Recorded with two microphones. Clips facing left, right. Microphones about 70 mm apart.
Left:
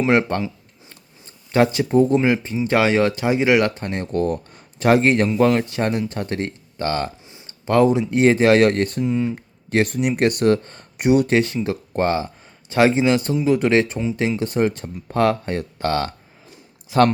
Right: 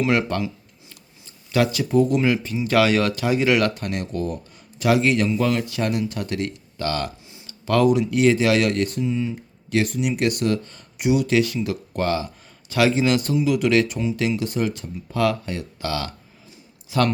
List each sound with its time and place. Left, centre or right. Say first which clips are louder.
0.0 s speech: left 3 dB; left
1.5 s speech: left 3 dB; left
4.1 s speech: left 6 dB; left